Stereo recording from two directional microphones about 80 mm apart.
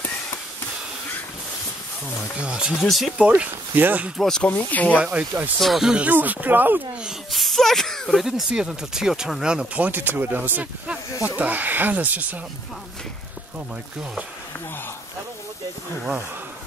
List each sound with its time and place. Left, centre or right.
2.4 s speech: centre
2.8 s speech: centre
3.2 s speech: centre
4.2 s speech: centre
4.5 s speech: left
5.6 s speech: centre
6.0 s speech: right
7.2 s speech: centre
9.8 s speech: right